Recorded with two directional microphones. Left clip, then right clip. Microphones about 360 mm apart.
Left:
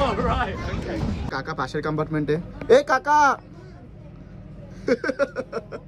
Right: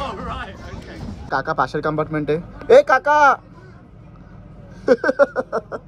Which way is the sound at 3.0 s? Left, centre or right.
Centre.